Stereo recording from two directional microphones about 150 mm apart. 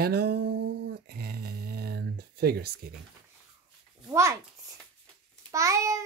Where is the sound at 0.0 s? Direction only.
90° right.